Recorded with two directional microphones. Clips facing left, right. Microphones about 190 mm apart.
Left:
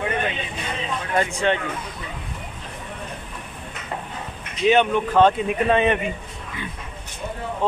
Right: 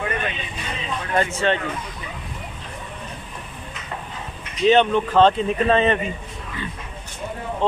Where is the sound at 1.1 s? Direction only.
15° left (ahead or behind).